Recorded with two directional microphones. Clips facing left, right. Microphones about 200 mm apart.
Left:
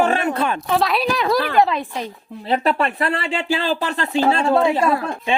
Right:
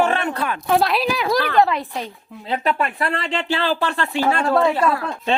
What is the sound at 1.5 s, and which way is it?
Speech, 15° left (ahead or behind).